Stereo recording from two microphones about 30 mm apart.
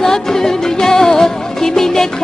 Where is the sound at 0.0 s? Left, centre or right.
Centre.